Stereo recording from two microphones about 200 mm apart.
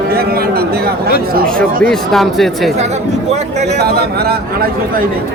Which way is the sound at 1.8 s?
Centre (ahead or behind).